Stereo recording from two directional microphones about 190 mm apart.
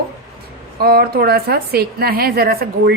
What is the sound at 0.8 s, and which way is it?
A woman's voice, 55° right (ahead or behind).